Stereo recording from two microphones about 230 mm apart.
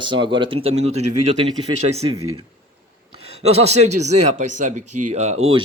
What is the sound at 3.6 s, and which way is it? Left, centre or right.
Speech, right.